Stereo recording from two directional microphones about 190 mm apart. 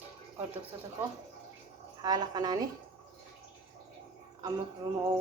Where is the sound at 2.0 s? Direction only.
20° right (ahead or behind).